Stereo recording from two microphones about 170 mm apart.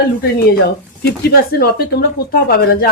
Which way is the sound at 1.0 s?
65° left (ahead or behind).